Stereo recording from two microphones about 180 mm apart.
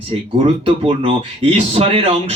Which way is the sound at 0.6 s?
30° right (ahead or behind).